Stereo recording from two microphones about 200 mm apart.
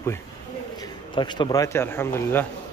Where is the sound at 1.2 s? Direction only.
20° left (ahead or behind).